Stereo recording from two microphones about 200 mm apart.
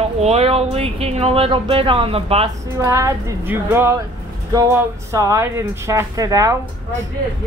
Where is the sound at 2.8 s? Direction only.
15° right (ahead or behind).